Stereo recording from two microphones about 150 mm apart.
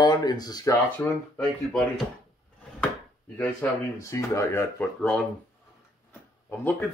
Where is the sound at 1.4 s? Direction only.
5° left (ahead or behind).